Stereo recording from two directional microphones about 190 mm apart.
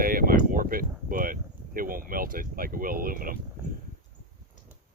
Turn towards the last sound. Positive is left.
turn(degrees=-50)  # may be behind; listen again after turning